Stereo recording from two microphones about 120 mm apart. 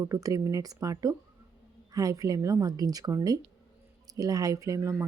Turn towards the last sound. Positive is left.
turn(degrees=-25)  # may be behind; listen again after turning